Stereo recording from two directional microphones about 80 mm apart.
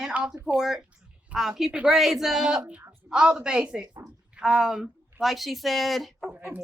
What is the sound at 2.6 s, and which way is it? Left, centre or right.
A woman's voice, centre.